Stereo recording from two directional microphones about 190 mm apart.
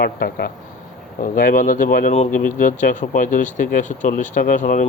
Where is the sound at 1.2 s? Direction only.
45° left (ahead or behind).